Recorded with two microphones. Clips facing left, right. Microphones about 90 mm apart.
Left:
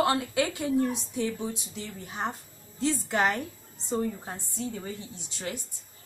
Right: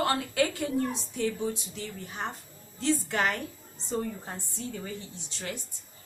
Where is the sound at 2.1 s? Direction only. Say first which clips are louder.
Left 3 dB; 15° left (ahead or behind).